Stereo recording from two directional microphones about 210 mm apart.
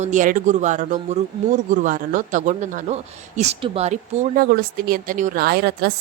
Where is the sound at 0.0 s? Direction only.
35° right (ahead or behind).